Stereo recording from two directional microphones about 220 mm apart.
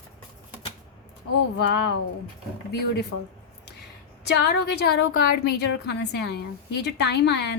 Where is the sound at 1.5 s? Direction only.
45° left (ahead or behind).